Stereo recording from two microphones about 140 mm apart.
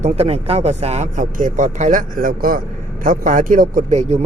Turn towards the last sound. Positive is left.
turn(degrees=-50)  # may be behind; listen again after turning